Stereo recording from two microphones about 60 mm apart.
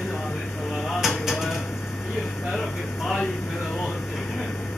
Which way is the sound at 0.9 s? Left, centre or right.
Centre.